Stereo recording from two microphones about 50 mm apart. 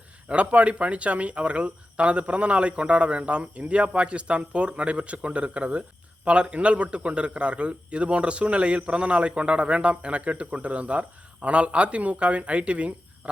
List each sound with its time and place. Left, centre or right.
0.3 s a man's voice: right